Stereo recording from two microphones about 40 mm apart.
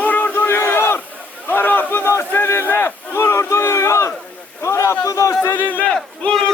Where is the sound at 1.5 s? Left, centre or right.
Left.